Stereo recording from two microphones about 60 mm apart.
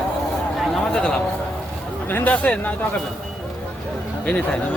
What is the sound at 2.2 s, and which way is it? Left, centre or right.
Speech, left.